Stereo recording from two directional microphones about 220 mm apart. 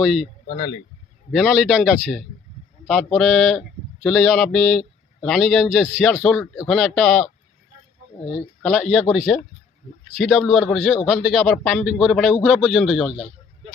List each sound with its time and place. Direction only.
0.0 s a man's voice: centre (ahead or behind)
0.5 s speech: 20° left (ahead or behind)
1.3 s a man's voice: centre (ahead or behind)
8.3 s a man's voice: centre (ahead or behind)